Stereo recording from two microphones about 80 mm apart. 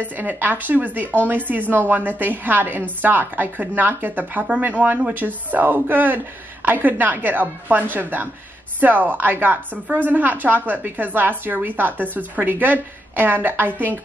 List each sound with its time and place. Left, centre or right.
0.2 s speech: right